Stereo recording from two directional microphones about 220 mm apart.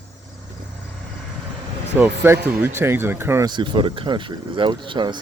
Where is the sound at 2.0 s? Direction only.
10° right (ahead or behind).